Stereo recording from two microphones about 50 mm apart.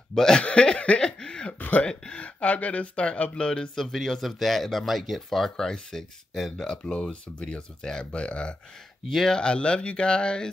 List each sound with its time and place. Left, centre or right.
0.1 s speech: centre
0.4 s chuckle: left
1.6 s throat clearing: left
2.1 s speech: left
9.1 s speech: centre
9.4 s speech: left